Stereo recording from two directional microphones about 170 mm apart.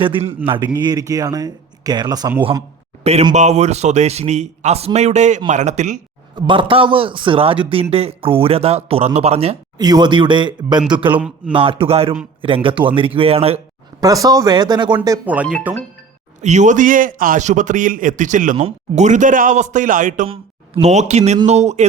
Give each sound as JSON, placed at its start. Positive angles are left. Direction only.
{"t": 0.0, "sound": "speech", "side_deg": -30}
{"t": 3.0, "sound": "a man's voice", "side_deg": -40}
{"t": 6.3, "sound": "a man's voice", "side_deg": -30}
{"t": 9.7, "sound": "speech", "side_deg": -25}
{"t": 11.1, "sound": "speech", "side_deg": -10}
{"t": 11.5, "sound": "a man's voice", "side_deg": -30}
{"t": 14.0, "sound": "speech", "side_deg": -20}
{"t": 15.3, "sound": "speech", "side_deg": -5}
{"t": 16.4, "sound": "a man's voice", "side_deg": -45}
{"t": 20.2, "sound": "a man's voice", "side_deg": -30}